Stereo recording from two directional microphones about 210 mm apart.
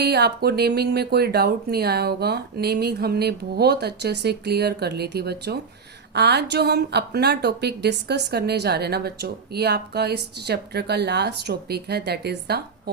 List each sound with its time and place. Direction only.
0.0 s a woman's voice: 50° right (ahead or behind)